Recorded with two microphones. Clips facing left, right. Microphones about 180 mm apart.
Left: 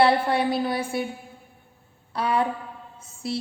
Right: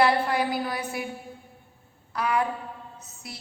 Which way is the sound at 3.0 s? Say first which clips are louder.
Left 13 dB; 30° left (ahead or behind).